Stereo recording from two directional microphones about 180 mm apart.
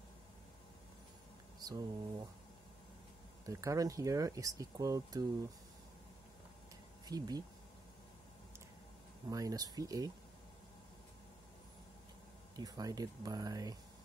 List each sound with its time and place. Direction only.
1.6 s speech: 20° right (ahead or behind)
3.4 s speech: 20° right (ahead or behind)
7.1 s speech: 20° right (ahead or behind)
9.3 s speech: 20° right (ahead or behind)
12.5 s speech: 20° right (ahead or behind)